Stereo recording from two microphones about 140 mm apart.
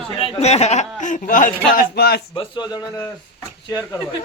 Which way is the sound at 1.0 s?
65° left (ahead or behind).